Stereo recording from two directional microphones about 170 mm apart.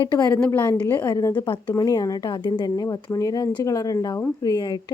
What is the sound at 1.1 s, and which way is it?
Speech, 20° left (ahead or behind).